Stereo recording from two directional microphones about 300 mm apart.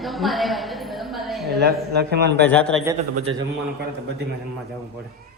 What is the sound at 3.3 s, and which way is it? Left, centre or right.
Speech, right.